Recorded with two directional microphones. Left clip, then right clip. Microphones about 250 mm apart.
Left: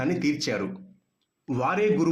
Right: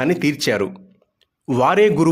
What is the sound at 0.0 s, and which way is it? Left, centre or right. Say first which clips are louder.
Speech: right 8 dB; right.